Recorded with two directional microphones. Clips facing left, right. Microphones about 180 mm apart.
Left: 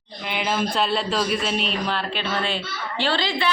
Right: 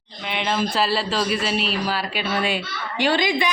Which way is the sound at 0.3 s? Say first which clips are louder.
Right 1 dB; centre (ahead or behind).